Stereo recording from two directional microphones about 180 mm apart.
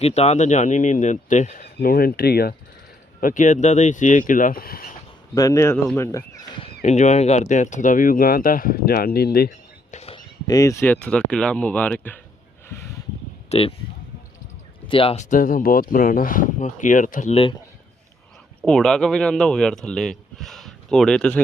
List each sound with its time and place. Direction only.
0.0 s speech: 35° left (ahead or behind)
1.6 s speech: 55° left (ahead or behind)
3.2 s speech: 50° left (ahead or behind)
5.3 s speech: 20° left (ahead or behind)
6.8 s speech: 40° left (ahead or behind); by 9.5 s 55° left (ahead or behind)
9.9 s a sound: 35° left (ahead or behind)
10.2 s speech: 20° left (ahead or behind)
13.5 s speech: 35° left (ahead or behind)
14.8 s speech: 30° left (ahead or behind)
18.6 s speech: 5° left (ahead or behind)